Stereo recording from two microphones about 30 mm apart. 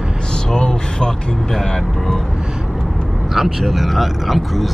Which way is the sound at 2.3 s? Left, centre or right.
Right.